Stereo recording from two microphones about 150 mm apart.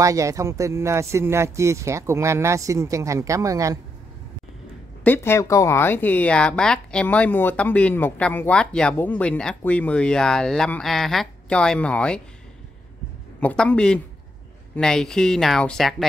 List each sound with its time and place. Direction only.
0.0 s speech: 20° right (ahead or behind)
5.0 s speech: 15° left (ahead or behind)
13.4 s speech: 10° left (ahead or behind)